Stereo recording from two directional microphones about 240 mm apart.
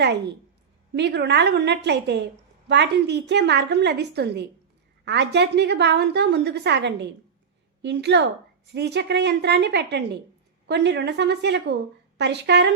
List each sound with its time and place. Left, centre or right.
0.9 s a woman's voice: right